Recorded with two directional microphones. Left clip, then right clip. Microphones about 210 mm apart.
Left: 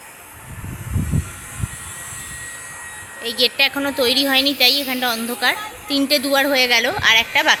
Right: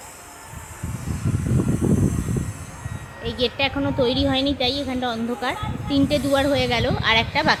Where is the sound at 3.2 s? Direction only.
Centre (ahead or behind).